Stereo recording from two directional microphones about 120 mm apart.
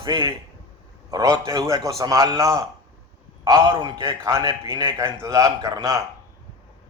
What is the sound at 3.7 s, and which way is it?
Speech, 40° right (ahead or behind).